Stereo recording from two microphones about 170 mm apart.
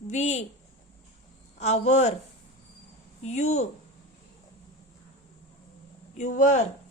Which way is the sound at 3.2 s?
40° left (ahead or behind).